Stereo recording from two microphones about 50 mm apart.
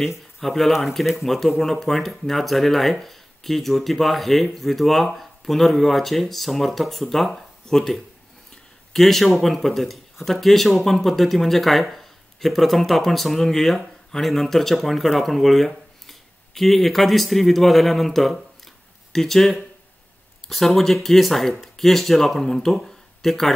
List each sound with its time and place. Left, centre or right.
0.4 s speech: centre